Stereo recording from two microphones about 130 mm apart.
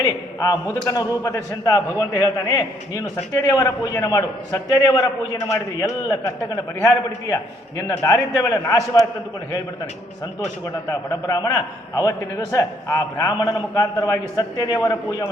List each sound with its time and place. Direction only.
0.0 s a man's voice: 25° left (ahead or behind)
10.8 s a man's voice: 25° left (ahead or behind)